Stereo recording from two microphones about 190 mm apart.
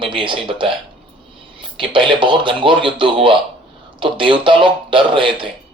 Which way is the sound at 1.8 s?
25° right (ahead or behind).